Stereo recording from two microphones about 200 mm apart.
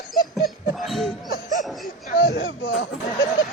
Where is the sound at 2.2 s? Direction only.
55° left (ahead or behind).